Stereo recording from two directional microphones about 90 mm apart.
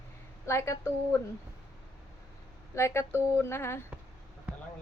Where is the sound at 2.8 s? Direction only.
30° left (ahead or behind).